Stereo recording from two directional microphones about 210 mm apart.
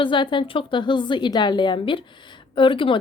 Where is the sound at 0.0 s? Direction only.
25° left (ahead or behind).